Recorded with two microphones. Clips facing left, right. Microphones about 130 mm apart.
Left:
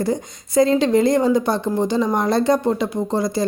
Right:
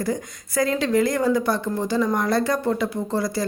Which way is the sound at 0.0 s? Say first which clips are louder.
Left 4 dB; 25° left (ahead or behind).